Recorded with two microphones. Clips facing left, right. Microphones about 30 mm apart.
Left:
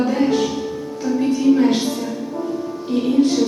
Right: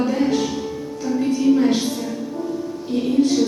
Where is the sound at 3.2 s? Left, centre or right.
Centre.